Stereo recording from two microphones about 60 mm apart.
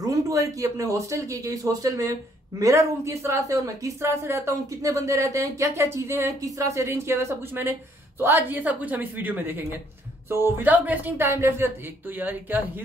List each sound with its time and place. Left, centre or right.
0.0 s speech: right
2.6 s a woman's voice: right
4.8 s a woman's voice: right
11.1 s a woman's voice: right
12.2 s a woman's voice: right